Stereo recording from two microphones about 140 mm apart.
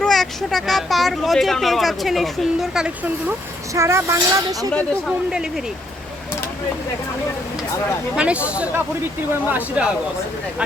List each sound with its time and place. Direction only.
0.0 s speech: centre (ahead or behind)
3.8 s speech: 20° right (ahead or behind)
4.7 s speech: 10° left (ahead or behind)
8.1 s speech: 10° right (ahead or behind)